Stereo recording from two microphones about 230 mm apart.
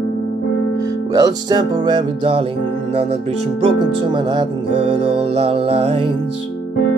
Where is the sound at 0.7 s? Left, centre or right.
Centre.